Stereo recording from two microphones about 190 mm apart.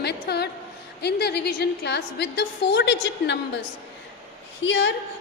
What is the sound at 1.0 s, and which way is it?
A woman's voice, 60° left (ahead or behind).